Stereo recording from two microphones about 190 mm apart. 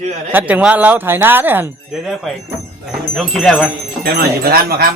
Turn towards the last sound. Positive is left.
turn(degrees=-55)  # may be behind; listen again after turning